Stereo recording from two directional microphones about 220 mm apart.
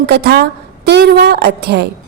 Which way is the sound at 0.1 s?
45° right (ahead or behind).